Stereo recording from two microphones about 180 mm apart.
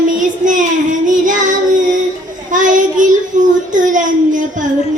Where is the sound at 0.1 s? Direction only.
45° right (ahead or behind).